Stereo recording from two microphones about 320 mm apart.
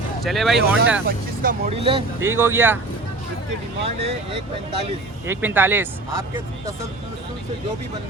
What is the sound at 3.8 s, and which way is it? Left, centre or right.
Speech, centre.